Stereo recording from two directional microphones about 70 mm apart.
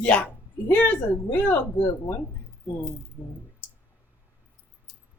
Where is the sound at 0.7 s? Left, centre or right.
Left.